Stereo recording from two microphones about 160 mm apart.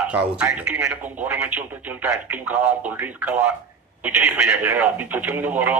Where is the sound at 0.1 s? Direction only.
10° right (ahead or behind).